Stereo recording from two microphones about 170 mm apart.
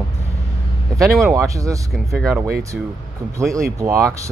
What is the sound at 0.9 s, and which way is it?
Speech, centre (ahead or behind).